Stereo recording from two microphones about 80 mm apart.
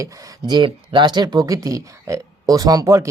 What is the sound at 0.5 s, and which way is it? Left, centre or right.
Speech, right.